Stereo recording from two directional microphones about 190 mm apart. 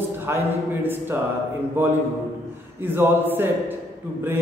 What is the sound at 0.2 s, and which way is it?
Speech, 10° right (ahead or behind).